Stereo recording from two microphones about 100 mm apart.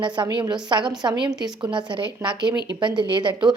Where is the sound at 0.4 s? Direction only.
45° right (ahead or behind).